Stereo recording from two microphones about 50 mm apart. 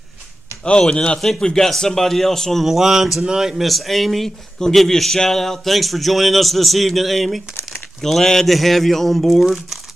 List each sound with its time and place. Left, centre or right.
0.7 s a man's voice: centre
2.6 s speech: centre